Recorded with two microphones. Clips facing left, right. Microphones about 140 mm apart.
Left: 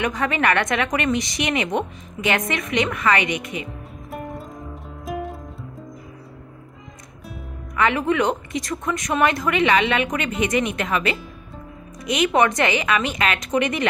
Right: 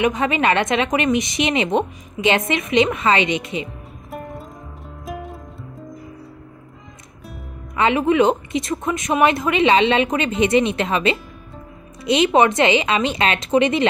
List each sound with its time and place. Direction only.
0.0 s speech: 20° right (ahead or behind)
3.6 s music: centre (ahead or behind)
7.7 s speech: 20° right (ahead or behind)